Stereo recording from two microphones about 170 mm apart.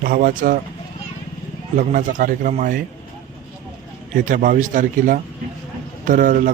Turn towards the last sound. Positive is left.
turn(degrees=-50)  # may be behind; listen again after turning